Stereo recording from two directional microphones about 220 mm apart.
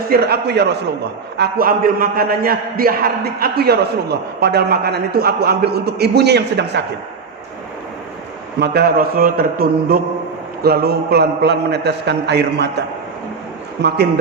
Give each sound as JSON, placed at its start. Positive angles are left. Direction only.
{"t": 0.1, "sound": "a man's voice", "side_deg": -45}
{"t": 8.5, "sound": "a man's voice", "side_deg": -45}
{"t": 13.8, "sound": "a man's voice", "side_deg": -50}